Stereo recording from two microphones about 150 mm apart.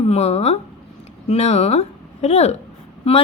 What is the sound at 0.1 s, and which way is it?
A woman's voice, 45° left (ahead or behind).